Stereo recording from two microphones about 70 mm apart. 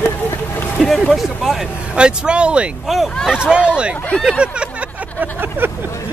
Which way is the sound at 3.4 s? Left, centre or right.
Centre.